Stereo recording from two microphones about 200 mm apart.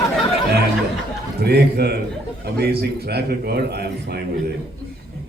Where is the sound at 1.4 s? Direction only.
55° right (ahead or behind).